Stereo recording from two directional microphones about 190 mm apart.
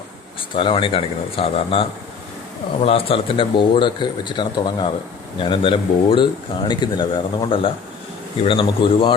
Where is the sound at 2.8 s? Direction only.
30° left (ahead or behind).